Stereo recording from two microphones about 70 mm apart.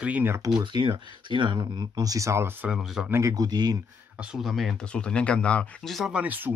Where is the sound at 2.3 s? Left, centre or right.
Right.